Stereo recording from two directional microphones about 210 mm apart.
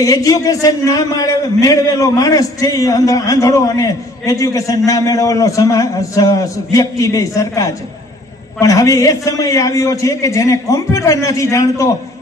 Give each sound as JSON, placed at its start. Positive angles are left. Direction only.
{"t": 0.0, "sound": "a man's voice", "side_deg": 15}